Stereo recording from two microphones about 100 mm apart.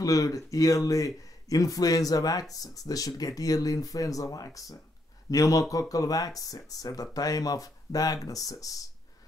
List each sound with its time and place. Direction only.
0.0 s speech: 35° left (ahead or behind)